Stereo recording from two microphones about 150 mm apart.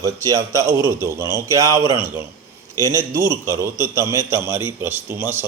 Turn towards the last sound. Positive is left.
turn(degrees=-15)  # may be behind; listen again after turning